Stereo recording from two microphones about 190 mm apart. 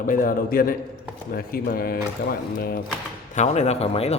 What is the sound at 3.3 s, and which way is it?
Mantra, 35° left (ahead or behind).